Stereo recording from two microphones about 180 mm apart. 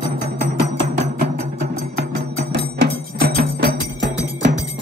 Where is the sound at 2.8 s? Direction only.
65° right (ahead or behind).